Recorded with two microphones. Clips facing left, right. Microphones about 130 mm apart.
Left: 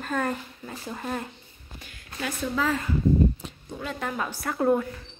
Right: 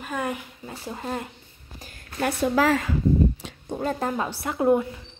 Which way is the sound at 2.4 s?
75° right (ahead or behind).